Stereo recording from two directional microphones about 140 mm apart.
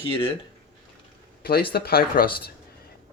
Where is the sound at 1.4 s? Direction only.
90° left.